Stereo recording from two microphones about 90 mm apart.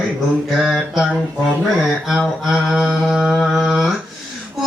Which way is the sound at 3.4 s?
Centre (ahead or behind).